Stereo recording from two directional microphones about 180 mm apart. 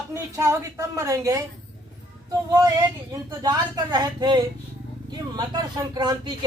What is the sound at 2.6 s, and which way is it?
Speech, 20° right (ahead or behind).